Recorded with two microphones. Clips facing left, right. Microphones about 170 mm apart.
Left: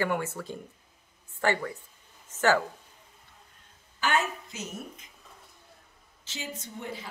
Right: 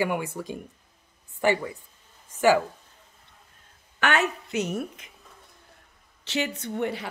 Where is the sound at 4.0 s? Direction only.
70° right (ahead or behind).